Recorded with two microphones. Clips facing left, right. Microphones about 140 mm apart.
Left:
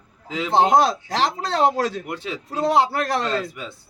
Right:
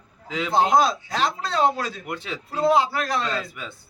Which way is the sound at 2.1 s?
30° left (ahead or behind).